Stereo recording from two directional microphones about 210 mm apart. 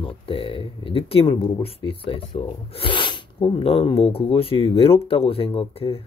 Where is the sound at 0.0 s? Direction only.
25° left (ahead or behind).